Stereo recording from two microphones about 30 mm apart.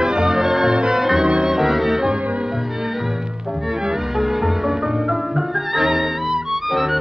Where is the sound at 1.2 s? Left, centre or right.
Right.